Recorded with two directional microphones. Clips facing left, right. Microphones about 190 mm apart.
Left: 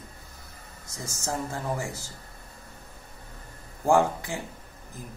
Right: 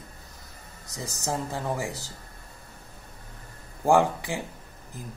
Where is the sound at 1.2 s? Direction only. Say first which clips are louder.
Right 1 dB; 15° right (ahead or behind).